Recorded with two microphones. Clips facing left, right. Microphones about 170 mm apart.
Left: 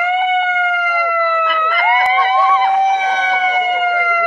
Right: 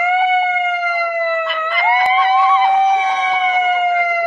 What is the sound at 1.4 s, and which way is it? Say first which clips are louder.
Emergency vehicle: left 2 dB; 45° left (ahead or behind).